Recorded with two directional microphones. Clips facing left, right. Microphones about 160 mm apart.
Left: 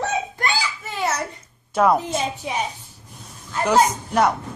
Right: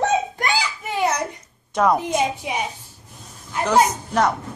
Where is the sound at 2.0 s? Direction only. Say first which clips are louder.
Right 3 dB; 15° right (ahead or behind).